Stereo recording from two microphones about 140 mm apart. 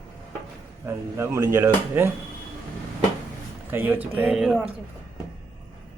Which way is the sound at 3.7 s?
15° right (ahead or behind).